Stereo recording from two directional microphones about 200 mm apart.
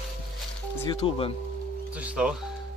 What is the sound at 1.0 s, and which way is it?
Speech, 30° left (ahead or behind).